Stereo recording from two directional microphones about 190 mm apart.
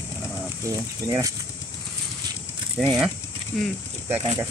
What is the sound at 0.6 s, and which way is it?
Speech, 15° right (ahead or behind).